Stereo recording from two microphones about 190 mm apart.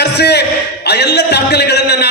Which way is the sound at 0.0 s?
60° left (ahead or behind).